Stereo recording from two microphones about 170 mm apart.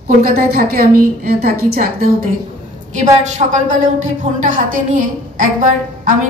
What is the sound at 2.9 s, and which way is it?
A woman's voice, 45° right (ahead or behind).